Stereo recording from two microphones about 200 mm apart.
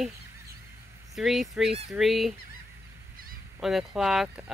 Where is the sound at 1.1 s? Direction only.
Centre (ahead or behind).